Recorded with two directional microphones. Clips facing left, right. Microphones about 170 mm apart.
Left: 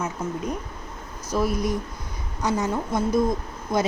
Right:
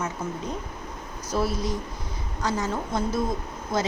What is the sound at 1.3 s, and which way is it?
A woman's voice, 15° left (ahead or behind).